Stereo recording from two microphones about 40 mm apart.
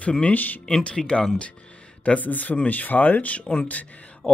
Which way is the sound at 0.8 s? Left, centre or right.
Left.